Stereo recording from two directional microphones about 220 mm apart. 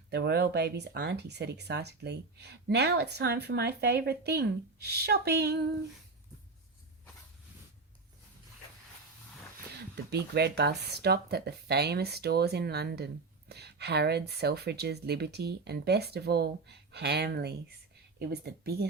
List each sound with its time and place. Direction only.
0.1 s speech: 50° right (ahead or behind)
10.1 s speech: 50° right (ahead or behind)